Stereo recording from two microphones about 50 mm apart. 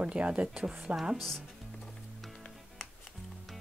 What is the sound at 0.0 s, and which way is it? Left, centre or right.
Speech, right.